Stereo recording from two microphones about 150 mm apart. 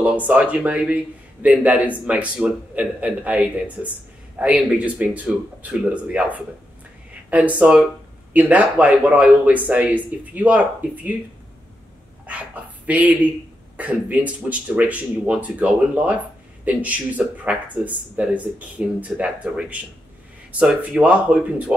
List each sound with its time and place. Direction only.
0.0 s a man's voice: 10° right (ahead or behind)
12.3 s a man's voice: 10° right (ahead or behind)